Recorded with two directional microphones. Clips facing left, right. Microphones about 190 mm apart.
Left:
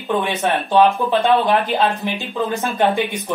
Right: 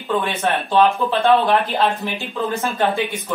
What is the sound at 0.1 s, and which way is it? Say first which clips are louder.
Speech: left 1 dB; 15° left (ahead or behind).